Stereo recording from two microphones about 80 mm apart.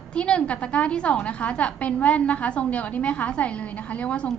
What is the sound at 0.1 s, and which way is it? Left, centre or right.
A woman's voice, centre.